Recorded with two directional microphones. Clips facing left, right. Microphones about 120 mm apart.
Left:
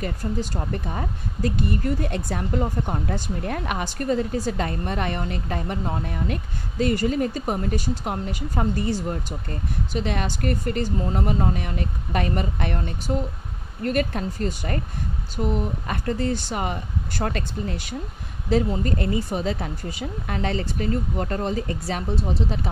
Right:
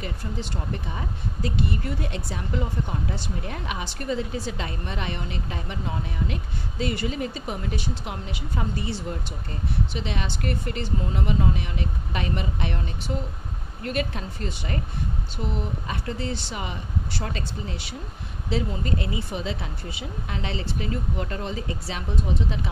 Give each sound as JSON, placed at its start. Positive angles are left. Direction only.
{"t": 0.0, "sound": "a woman's voice", "side_deg": 40}